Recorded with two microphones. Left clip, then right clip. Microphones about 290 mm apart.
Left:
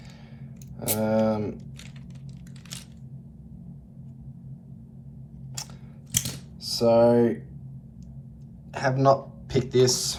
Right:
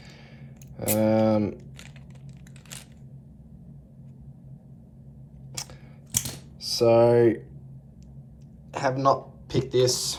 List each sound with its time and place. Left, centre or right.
0.8 s speech: right
5.6 s chewing: right
6.6 s speech: right
8.7 s speech: centre